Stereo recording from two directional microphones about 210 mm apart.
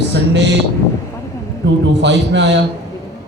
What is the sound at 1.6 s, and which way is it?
A man's voice, 55° right (ahead or behind).